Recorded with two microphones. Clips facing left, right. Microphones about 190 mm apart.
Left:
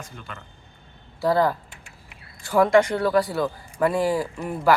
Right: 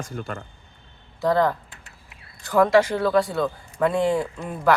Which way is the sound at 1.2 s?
5° left (ahead or behind).